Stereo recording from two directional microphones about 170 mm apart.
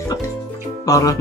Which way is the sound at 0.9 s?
20° left (ahead or behind).